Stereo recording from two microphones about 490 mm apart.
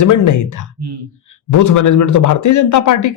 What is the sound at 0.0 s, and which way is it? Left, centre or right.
Speech, left.